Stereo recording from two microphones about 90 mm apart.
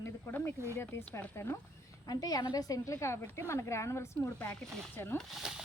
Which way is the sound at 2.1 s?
45° left (ahead or behind).